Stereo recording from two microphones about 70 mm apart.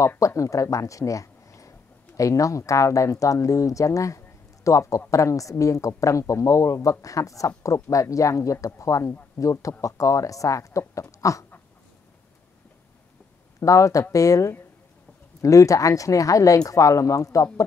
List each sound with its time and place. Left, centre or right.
0.4 s a woman's voice: left
13.6 s a woman's voice: left